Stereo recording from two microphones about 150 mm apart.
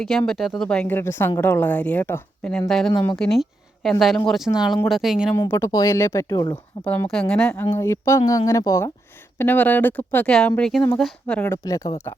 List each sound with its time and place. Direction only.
0.0 s speech: 5° left (ahead or behind)
5.5 s speech: 20° left (ahead or behind)
6.8 s speech: 10° left (ahead or behind)
7.7 s speech: 20° left (ahead or behind)